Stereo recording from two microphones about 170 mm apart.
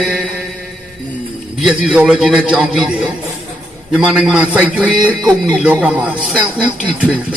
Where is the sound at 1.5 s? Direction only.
5° right (ahead or behind).